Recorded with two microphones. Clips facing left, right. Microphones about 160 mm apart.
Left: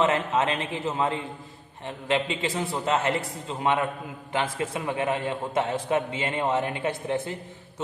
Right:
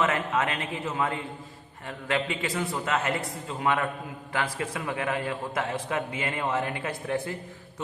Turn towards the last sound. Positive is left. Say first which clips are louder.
# left 2 dB
turn(degrees=25)  # may be behind; listen again after turning